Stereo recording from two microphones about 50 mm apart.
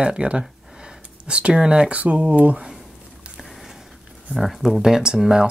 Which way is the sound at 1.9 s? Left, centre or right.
Right.